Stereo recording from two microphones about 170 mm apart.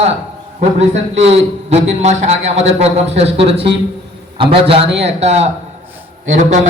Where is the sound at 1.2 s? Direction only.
40° right (ahead or behind).